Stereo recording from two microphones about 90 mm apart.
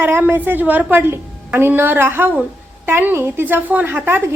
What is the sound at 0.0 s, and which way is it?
A woman's voice, 25° right (ahead or behind).